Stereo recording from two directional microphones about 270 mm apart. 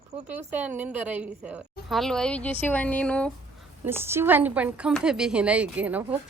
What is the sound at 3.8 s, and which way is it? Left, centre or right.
Speech, centre.